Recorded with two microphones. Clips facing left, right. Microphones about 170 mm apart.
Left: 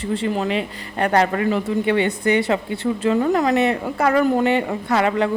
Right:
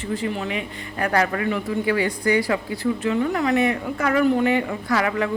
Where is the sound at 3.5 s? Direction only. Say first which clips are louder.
Left 2 dB; 30° left (ahead or behind).